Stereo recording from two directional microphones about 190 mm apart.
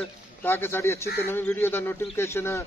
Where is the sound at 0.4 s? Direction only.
10° left (ahead or behind).